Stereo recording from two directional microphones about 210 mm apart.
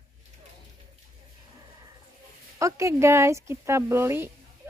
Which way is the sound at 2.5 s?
15° right (ahead or behind).